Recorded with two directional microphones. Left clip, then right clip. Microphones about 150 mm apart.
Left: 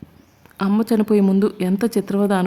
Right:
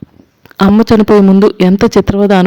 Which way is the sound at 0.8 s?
40° right (ahead or behind).